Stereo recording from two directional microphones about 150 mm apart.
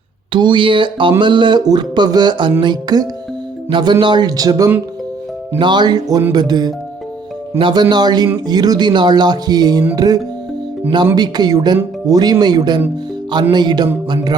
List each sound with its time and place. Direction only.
0.3 s speech: 30° right (ahead or behind)